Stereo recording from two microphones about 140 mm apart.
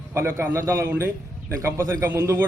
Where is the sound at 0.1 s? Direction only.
20° right (ahead or behind).